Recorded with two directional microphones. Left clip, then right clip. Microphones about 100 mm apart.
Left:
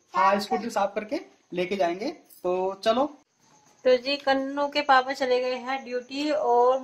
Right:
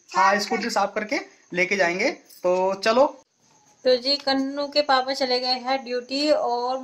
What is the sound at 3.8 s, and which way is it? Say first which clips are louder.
Speech: right 1 dB; 5° left (ahead or behind).